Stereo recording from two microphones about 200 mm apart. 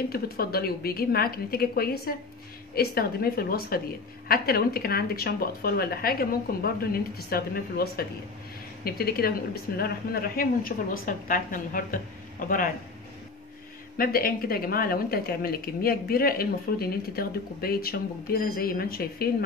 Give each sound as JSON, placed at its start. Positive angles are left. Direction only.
{"t": 0.1, "sound": "speech", "side_deg": 50}
{"t": 13.9, "sound": "speech", "side_deg": 45}